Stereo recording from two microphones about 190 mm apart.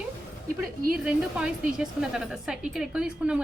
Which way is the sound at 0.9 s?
5° right (ahead or behind).